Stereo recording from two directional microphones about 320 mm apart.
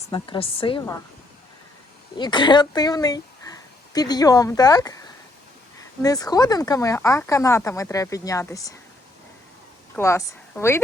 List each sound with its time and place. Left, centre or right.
0.1 s speech: centre
2.1 s speech: centre
3.5 s a sound: centre
3.9 s speech: centre
6.0 s speech: centre
9.9 s a woman's voice: centre